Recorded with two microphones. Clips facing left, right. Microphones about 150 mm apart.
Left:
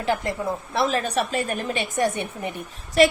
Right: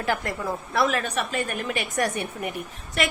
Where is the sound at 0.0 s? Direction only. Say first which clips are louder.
Left 2 dB; 25° left (ahead or behind).